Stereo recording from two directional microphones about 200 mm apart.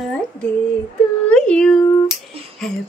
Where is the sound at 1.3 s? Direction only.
5° left (ahead or behind).